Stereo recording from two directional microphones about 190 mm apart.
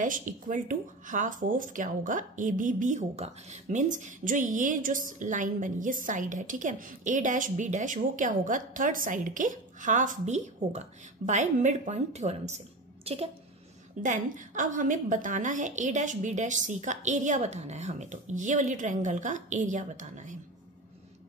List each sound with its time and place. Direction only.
0.0 s a woman's voice: 45° right (ahead or behind)